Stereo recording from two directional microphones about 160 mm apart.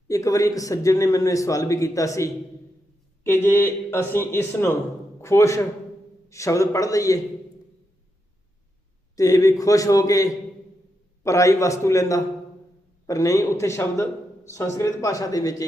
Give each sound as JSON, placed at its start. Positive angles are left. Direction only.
{"t": 0.1, "sound": "a man's voice", "side_deg": 20}
{"t": 9.1, "sound": "a man's voice", "side_deg": 20}